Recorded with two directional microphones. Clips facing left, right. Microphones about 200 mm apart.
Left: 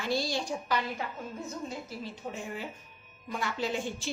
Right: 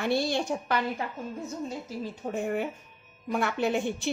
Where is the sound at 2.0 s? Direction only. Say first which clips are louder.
Right 7 dB; 55° right (ahead or behind).